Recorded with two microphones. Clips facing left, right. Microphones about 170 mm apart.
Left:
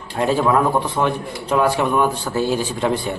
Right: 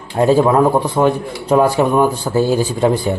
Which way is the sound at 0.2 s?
35° right (ahead or behind).